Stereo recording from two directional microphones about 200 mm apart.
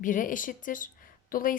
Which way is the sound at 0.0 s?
40° left (ahead or behind).